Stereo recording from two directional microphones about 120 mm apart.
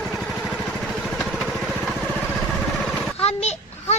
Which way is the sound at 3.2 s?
65° left (ahead or behind).